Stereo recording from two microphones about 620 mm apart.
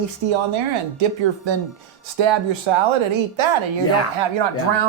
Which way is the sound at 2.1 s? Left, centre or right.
Right.